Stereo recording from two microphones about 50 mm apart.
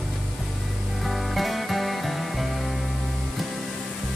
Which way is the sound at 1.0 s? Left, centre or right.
Centre.